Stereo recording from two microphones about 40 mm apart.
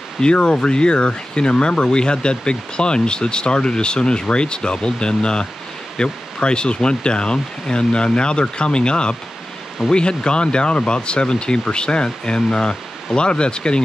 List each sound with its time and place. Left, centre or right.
0.2 s speech: left